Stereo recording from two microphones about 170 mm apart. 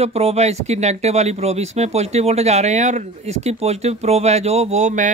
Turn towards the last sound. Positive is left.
turn(degrees=-45)  # may be behind; listen again after turning